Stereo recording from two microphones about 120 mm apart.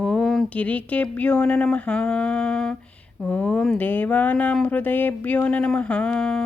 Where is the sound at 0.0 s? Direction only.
5° left (ahead or behind).